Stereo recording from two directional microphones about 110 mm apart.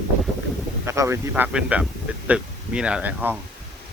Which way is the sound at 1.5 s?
10° right (ahead or behind).